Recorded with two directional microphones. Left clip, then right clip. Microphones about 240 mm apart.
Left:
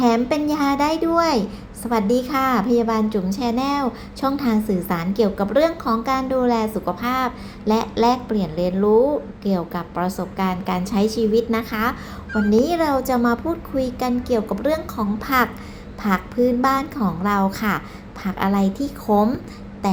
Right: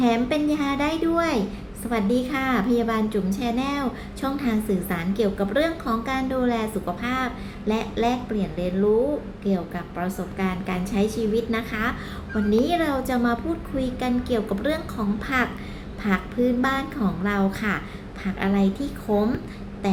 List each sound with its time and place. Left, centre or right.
0.0 s a child's voice: centre